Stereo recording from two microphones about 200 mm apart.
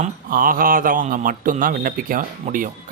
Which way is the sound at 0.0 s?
45° right (ahead or behind).